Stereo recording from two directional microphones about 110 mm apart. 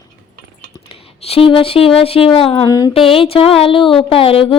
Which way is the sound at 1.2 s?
60° left (ahead or behind).